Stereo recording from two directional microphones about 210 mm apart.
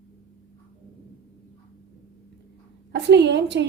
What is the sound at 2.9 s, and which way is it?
Speech, 55° right (ahead or behind).